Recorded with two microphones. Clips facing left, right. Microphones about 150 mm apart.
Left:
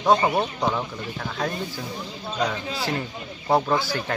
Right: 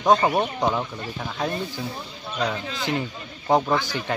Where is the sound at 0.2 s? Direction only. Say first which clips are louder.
Right 1 dB; 15° right (ahead or behind).